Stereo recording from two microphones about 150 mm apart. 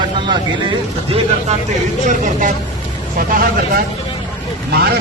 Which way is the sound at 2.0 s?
60° right (ahead or behind).